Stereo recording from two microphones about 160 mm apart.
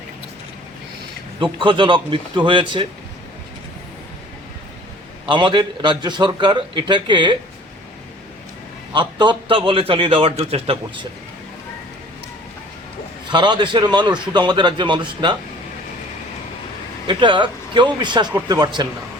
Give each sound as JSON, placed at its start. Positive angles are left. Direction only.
{"t": 1.4, "sound": "a man's voice", "side_deg": -30}
{"t": 5.3, "sound": "a man's voice", "side_deg": -30}
{"t": 8.9, "sound": "a man's voice", "side_deg": -30}
{"t": 13.2, "sound": "a man's voice", "side_deg": -30}
{"t": 17.1, "sound": "a man's voice", "side_deg": -30}